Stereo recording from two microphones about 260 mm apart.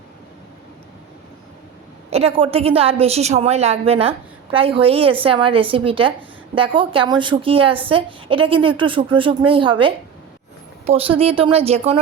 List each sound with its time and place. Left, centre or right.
2.0 s a woman's voice: right